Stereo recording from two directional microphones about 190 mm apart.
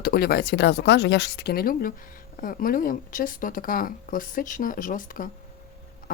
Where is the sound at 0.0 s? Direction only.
55° left (ahead or behind).